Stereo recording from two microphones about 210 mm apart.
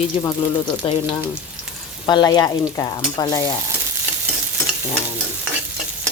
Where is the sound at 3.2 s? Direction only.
15° left (ahead or behind).